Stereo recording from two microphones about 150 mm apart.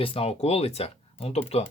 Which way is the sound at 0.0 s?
40° left (ahead or behind).